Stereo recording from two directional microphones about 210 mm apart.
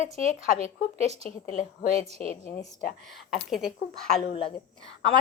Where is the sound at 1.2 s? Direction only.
40° left (ahead or behind).